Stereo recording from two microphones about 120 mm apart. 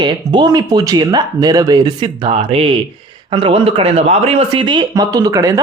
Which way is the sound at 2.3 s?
50° right (ahead or behind).